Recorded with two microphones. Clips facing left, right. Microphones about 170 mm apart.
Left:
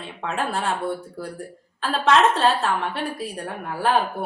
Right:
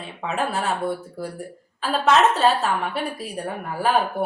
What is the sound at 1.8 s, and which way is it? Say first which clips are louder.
A woman's voice: even; 5° right (ahead or behind).